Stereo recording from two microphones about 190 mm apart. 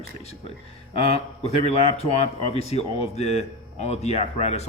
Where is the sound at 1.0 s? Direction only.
35° left (ahead or behind).